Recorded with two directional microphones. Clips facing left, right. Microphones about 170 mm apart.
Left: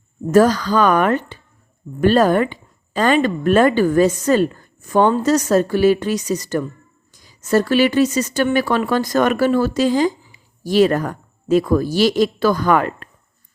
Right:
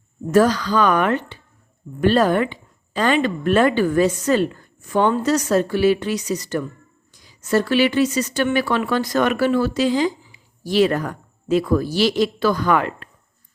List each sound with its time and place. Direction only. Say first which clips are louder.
0.3 s a woman's voice: left 3 dB; 45° left (ahead or behind)